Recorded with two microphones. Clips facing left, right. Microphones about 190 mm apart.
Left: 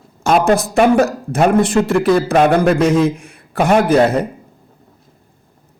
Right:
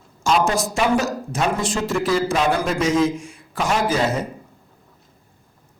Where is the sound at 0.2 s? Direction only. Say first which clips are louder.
Left 6 dB; 60° left (ahead or behind).